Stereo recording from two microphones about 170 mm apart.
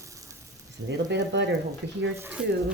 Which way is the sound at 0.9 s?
90° right.